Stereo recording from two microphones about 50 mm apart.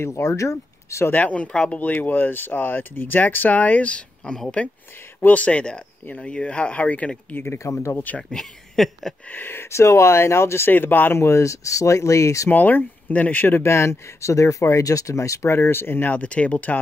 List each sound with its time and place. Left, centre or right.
0.0 s speech: left
1.1 s speech: left
7.4 s speech: left
7.9 s speech: left
8.2 s speech: centre
9.3 s speech: left
10.7 s speech: left
11.1 s speech: left
12.4 s speech: left
13.6 s speech: left
16.1 s speech: left